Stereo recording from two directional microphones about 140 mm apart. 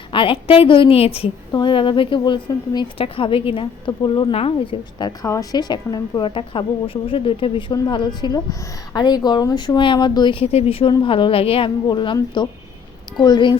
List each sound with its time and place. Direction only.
0.1 s a woman's voice: 40° left (ahead or behind)